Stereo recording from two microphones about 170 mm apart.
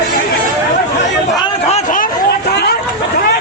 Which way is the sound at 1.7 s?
45° left (ahead or behind).